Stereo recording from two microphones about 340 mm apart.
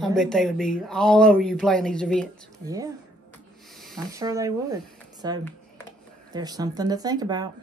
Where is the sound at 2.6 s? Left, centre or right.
Centre.